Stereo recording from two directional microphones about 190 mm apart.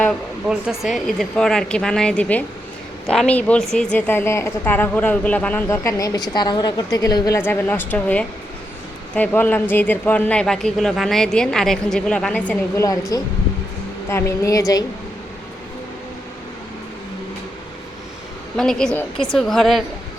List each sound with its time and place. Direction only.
0.0 s a man's voice: centre (ahead or behind)
12.8 s a woman's voice: 20° left (ahead or behind)
18.5 s a man's voice: 5° left (ahead or behind)